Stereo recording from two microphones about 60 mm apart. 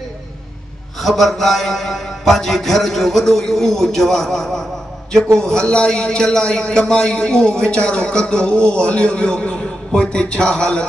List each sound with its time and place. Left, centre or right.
1.0 s a man's voice: centre